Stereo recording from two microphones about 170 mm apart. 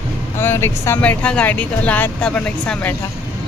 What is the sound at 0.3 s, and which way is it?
Speech, 15° left (ahead or behind).